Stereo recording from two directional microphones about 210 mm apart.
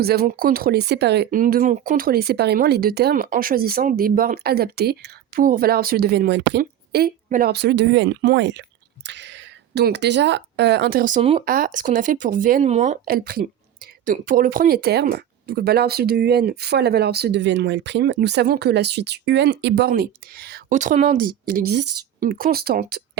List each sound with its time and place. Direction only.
0.0 s speech: 45° right (ahead or behind)